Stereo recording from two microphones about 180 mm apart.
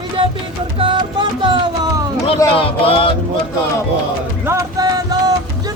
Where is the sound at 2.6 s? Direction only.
30° left (ahead or behind).